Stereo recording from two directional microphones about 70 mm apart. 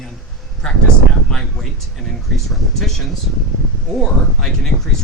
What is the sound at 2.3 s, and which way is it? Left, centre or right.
Speech, centre.